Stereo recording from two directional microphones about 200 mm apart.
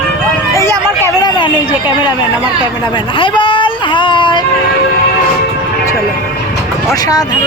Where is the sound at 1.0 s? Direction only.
20° left (ahead or behind).